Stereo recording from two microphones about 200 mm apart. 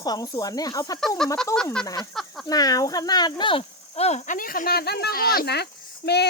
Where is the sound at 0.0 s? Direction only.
20° left (ahead or behind).